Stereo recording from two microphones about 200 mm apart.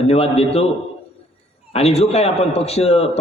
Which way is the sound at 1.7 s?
30° left (ahead or behind).